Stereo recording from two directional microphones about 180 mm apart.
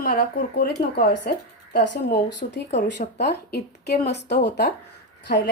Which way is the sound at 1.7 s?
70° left (ahead or behind).